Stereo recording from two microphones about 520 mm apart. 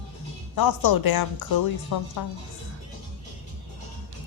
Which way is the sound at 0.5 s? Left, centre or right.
Left.